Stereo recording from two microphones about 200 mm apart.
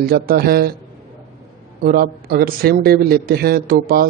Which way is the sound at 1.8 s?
45° right (ahead or behind).